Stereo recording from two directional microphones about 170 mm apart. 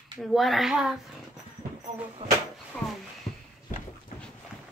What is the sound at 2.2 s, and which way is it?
Speech, 40° right (ahead or behind).